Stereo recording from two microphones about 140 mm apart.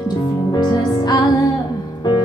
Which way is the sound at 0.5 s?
30° left (ahead or behind).